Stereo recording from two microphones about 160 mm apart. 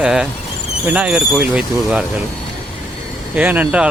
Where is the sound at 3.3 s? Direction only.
10° right (ahead or behind).